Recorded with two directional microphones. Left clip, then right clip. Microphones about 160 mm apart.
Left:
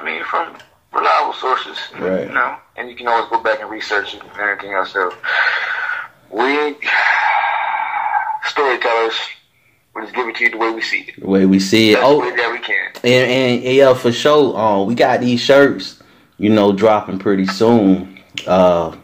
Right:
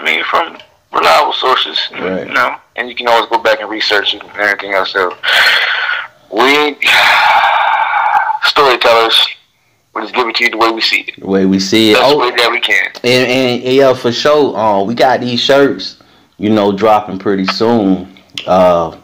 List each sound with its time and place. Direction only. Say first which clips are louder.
0.0 s a sound: right 8 dB; 35° right (ahead or behind)
0.9 s speech: right 6 dB; 35° right (ahead or behind)
11.2 s speech: left 1 dB; 20° right (ahead or behind)
12.0 s speech: right 4 dB; 35° right (ahead or behind); by 18.9 s 15° right (ahead or behind)